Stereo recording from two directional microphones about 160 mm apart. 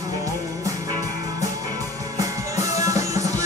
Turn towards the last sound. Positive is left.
turn(degrees=-20)  # may be behind; listen again after turning